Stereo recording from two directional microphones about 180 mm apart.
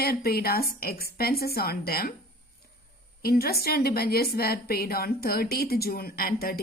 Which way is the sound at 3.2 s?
60° left (ahead or behind).